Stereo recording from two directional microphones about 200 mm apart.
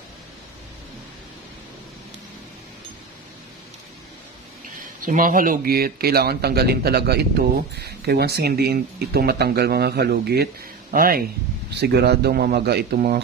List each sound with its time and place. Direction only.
5.0 s speech: 45° right (ahead or behind)